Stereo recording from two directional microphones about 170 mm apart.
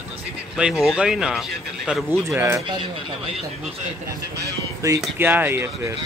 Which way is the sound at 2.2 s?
15° right (ahead or behind).